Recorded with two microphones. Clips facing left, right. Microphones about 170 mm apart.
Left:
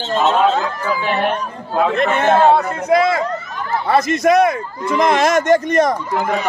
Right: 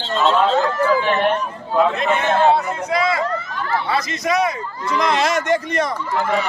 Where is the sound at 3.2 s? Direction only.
20° left (ahead or behind).